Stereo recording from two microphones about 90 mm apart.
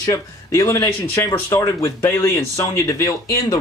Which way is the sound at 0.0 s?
35° left (ahead or behind).